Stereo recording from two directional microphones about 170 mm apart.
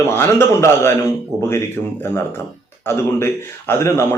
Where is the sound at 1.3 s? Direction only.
5° right (ahead or behind).